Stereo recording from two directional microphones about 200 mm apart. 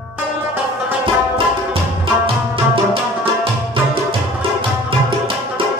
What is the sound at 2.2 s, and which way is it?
Music, 25° right (ahead or behind).